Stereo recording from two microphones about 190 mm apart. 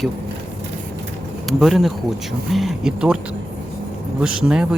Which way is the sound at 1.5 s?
Centre (ahead or behind).